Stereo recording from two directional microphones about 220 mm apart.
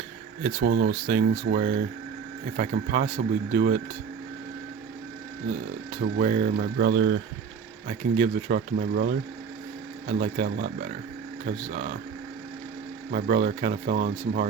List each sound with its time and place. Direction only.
0.4 s speech: 45° right (ahead or behind)
6.1 s speech: 40° right (ahead or behind)
7.9 s speech: 40° right (ahead or behind)
13.1 s speech: 40° right (ahead or behind)